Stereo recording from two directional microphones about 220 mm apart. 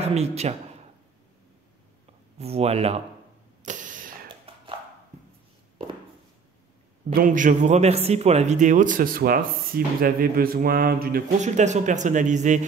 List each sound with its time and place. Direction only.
0.0 s speech: 30° right (ahead or behind)
2.3 s speech: 30° right (ahead or behind)
3.6 s a sound: 35° right (ahead or behind)
7.2 s speech: 35° right (ahead or behind)